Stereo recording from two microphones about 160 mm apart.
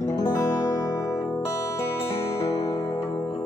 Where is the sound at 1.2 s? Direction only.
Centre (ahead or behind).